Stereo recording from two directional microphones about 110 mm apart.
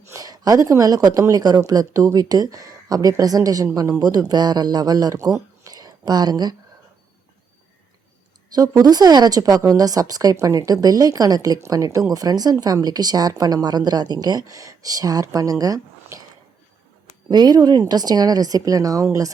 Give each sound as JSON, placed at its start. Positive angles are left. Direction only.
{"t": 0.1, "sound": "speech", "side_deg": -35}
{"t": 8.5, "sound": "speech", "side_deg": -35}
{"t": 17.2, "sound": "speech", "side_deg": -40}